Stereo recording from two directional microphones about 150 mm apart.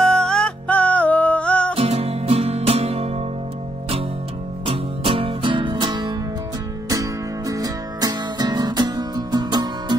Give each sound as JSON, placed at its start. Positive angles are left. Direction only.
{"t": 0.0, "sound": "music", "side_deg": 5}
{"t": 1.8, "sound": "music", "side_deg": -45}
{"t": 4.6, "sound": "music", "side_deg": -35}